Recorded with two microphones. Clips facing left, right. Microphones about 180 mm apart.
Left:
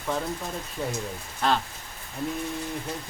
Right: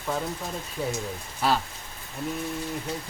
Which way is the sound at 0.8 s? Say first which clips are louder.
Right 1 dB; 5° right (ahead or behind).